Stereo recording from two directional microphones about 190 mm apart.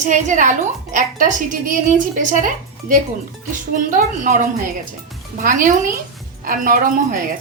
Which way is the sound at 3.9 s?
45° right (ahead or behind).